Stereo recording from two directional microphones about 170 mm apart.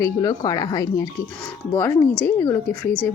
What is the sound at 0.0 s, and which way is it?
A woman's voice, 20° left (ahead or behind).